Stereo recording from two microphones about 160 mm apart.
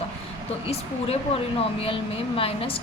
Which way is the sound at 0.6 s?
40° left (ahead or behind).